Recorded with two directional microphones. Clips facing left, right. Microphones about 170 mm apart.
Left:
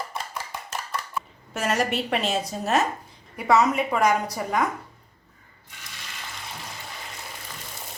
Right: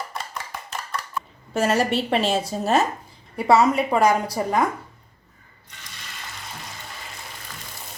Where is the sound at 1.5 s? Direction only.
30° right (ahead or behind).